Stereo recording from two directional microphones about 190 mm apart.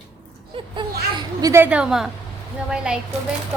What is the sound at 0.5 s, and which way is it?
A woman's voice, 25° right (ahead or behind).